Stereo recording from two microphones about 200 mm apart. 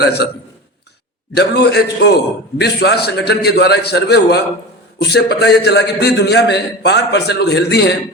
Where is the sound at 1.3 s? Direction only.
55° left (ahead or behind).